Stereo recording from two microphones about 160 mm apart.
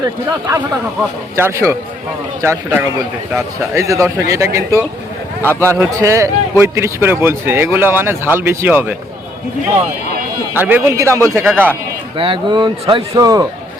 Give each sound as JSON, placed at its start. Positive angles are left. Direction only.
{"t": 0.4, "sound": "a man's voice", "side_deg": -20}
{"t": 5.4, "sound": "a man's voice", "side_deg": 15}
{"t": 5.8, "sound": "a man's voice", "side_deg": -20}
{"t": 10.5, "sound": "a man's voice", "side_deg": -10}
{"t": 12.1, "sound": "a man's voice", "side_deg": -30}